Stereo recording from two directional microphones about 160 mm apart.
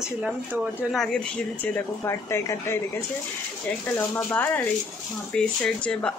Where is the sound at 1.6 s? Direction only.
15° left (ahead or behind).